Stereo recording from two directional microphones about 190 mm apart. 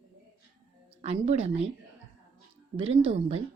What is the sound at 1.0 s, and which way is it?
Speech, 35° right (ahead or behind).